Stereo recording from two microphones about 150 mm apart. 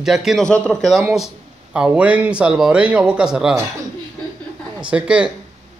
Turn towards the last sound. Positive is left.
turn(degrees=-5)  # may be behind; listen again after turning